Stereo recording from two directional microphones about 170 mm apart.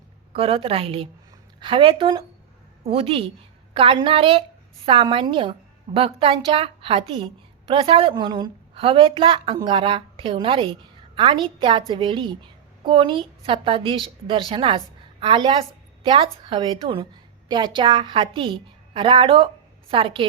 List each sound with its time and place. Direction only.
0.3 s a woman's voice: 35° right (ahead or behind)